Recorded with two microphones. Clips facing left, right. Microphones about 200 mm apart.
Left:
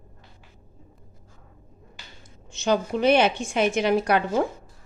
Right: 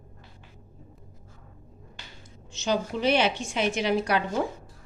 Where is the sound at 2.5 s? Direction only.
55° left (ahead or behind).